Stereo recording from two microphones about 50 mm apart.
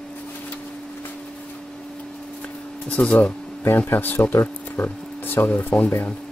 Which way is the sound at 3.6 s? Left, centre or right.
Left.